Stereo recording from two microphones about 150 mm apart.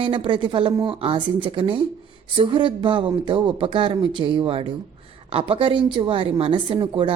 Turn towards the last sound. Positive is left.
turn(degrees=-35)  # may be behind; listen again after turning